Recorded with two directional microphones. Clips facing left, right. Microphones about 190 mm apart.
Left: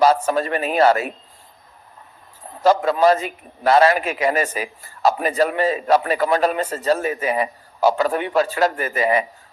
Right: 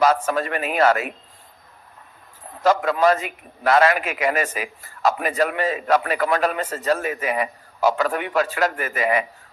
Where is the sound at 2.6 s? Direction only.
30° left (ahead or behind).